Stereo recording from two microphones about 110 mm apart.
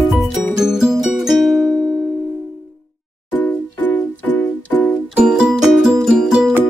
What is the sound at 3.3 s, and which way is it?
Music, 15° left (ahead or behind).